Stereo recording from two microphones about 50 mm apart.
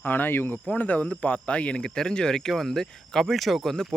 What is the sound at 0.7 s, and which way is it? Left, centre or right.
Speech, left.